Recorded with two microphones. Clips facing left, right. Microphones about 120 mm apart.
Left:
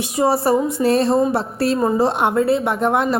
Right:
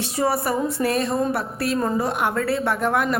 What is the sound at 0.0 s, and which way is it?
A woman's voice, 25° left (ahead or behind).